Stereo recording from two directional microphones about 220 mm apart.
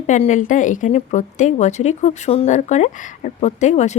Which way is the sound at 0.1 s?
35° left (ahead or behind).